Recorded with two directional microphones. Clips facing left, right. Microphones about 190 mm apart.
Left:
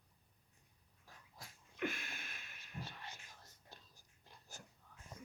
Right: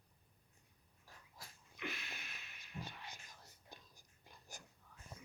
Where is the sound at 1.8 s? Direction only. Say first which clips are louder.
Left 6 dB; 50° left (ahead or behind).